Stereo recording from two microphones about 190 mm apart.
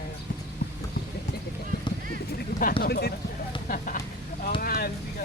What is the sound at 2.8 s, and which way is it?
Speech, 55° left (ahead or behind).